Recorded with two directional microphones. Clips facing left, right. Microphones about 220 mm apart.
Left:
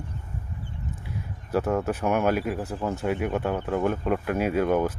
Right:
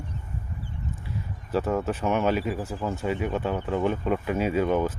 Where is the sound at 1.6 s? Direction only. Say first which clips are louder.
Left 1 dB; centre (ahead or behind).